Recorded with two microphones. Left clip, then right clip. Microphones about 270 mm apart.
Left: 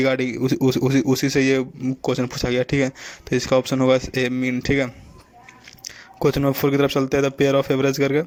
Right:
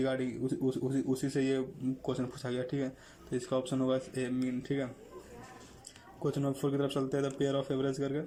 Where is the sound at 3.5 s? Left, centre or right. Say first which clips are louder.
Left 15 dB; left.